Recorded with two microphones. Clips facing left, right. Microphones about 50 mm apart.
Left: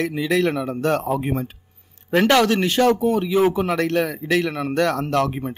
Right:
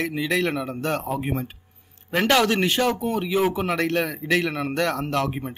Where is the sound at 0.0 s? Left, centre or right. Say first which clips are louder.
Left 3 dB; centre.